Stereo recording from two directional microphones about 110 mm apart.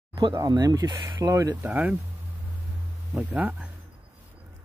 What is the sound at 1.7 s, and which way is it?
Speech, 15° right (ahead or behind).